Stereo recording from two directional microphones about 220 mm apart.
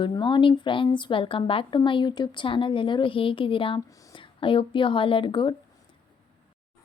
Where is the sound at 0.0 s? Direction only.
20° left (ahead or behind).